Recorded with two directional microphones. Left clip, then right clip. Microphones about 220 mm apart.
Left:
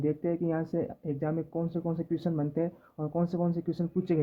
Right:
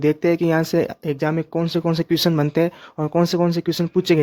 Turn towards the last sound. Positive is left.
turn(degrees=-40)  # may be behind; listen again after turning